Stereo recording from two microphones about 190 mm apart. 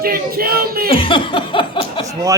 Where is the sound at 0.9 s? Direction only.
25° left (ahead or behind).